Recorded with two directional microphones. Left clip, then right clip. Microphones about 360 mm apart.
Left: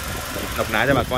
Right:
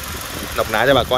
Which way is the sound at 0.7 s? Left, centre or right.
Centre.